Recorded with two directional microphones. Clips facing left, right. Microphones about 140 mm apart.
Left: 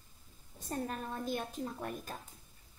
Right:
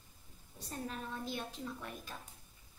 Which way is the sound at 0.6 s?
50° left (ahead or behind).